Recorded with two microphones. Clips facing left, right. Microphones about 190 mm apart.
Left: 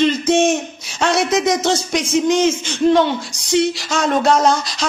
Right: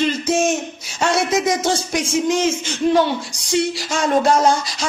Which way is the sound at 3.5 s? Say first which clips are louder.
Left 3 dB; 65° left (ahead or behind).